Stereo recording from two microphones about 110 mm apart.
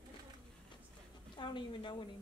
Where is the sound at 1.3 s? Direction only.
45° left (ahead or behind).